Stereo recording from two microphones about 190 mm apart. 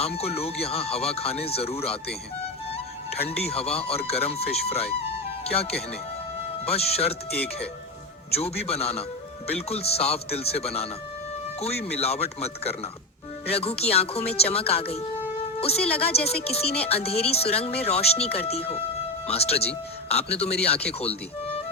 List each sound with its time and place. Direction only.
0.0 s speech: 30° left (ahead or behind)
3.2 s speech: 30° left (ahead or behind)
6.7 s speech: 30° left (ahead or behind)
8.4 s speech: 30° left (ahead or behind)